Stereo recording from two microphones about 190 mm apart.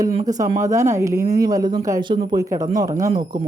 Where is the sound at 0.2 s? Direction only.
20° right (ahead or behind).